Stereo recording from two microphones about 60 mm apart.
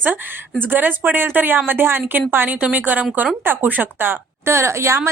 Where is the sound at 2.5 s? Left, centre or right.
Right.